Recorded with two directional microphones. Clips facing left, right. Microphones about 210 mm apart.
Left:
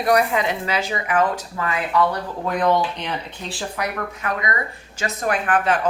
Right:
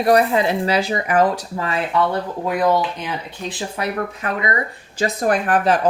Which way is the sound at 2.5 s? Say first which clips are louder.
Right 1 dB; 5° right (ahead or behind).